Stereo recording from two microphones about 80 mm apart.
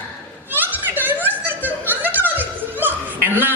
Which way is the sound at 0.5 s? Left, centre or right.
Right.